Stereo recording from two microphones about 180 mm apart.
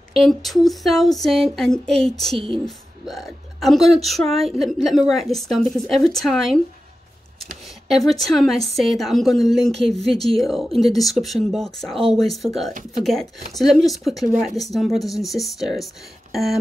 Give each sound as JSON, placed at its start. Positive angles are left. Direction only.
{"t": 0.1, "sound": "speech", "side_deg": 0}
{"t": 2.3, "sound": "speech", "side_deg": -30}
{"t": 2.6, "sound": "speech", "side_deg": 0}
{"t": 7.9, "sound": "speech", "side_deg": 0}